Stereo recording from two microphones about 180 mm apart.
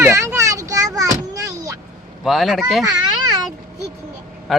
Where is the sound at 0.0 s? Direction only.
15° right (ahead or behind).